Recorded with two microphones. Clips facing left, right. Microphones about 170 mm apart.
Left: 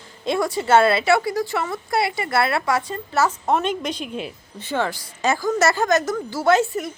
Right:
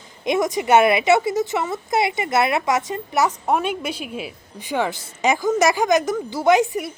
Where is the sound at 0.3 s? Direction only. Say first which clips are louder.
Right 1 dB; 20° right (ahead or behind).